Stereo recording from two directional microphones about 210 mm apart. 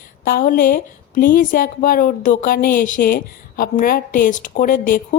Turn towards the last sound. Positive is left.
turn(degrees=40)  # may be behind; listen again after turning